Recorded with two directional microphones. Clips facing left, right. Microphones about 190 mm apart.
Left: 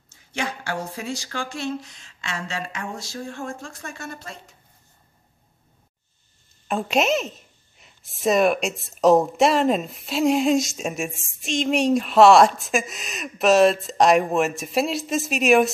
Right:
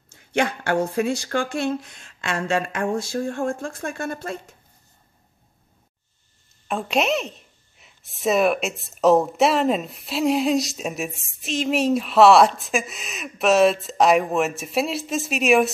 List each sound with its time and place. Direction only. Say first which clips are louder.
0.1 s speech: right 7 dB; 60° right (ahead or behind)
6.7 s speech: left 1 dB; centre (ahead or behind)